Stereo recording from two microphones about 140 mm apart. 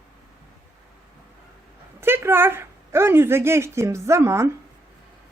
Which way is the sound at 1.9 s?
15° right (ahead or behind).